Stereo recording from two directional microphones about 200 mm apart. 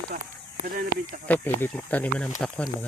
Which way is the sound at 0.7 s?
45° right (ahead or behind).